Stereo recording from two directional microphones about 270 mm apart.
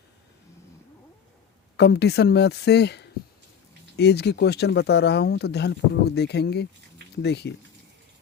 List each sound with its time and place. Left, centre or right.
1.7 s speech: left